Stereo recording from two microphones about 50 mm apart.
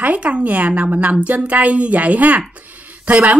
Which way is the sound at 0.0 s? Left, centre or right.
Right.